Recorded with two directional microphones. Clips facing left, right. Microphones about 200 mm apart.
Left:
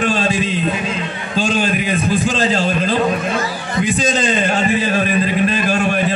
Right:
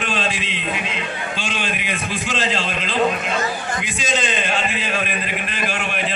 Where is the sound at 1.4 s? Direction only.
40° left (ahead or behind).